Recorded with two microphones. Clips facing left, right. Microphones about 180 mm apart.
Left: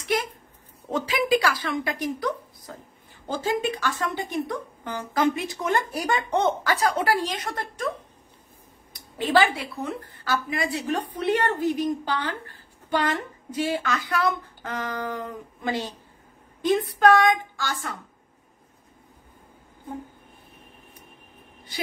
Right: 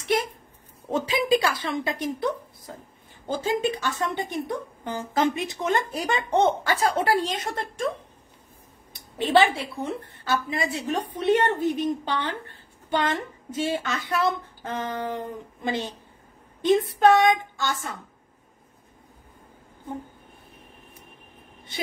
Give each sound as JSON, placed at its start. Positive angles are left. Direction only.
{"t": 0.0, "sound": "a sound", "side_deg": -25}
{"t": 0.9, "sound": "a woman's voice", "side_deg": -25}
{"t": 8.9, "sound": "a woman's voice", "side_deg": -25}